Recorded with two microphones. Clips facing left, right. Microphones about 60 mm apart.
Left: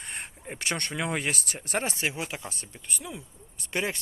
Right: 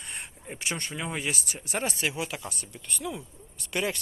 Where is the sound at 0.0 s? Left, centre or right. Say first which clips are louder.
Left 2 dB; left.